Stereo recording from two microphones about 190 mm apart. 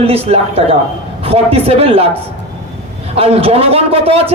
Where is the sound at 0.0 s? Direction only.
30° right (ahead or behind).